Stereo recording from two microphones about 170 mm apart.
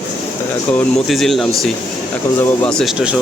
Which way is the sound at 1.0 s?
Centre (ahead or behind).